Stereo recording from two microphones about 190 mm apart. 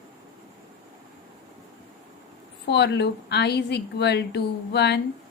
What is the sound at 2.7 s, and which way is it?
A woman's voice, 60° left (ahead or behind).